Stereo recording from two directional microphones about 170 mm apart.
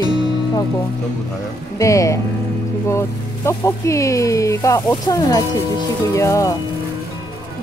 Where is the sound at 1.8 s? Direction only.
20° left (ahead or behind).